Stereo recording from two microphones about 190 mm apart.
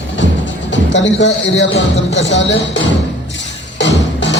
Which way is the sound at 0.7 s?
70° left (ahead or behind).